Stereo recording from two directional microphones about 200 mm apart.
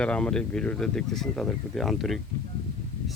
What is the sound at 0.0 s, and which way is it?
Speech, 5° left (ahead or behind).